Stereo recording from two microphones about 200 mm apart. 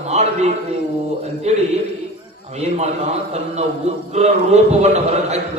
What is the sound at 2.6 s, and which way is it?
Speech, 35° right (ahead or behind).